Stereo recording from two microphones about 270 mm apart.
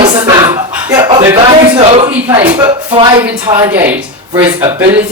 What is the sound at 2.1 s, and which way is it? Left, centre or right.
A man's voice, centre.